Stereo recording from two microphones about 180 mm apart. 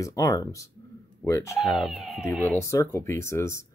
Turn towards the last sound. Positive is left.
turn(degrees=15)  # may be behind; listen again after turning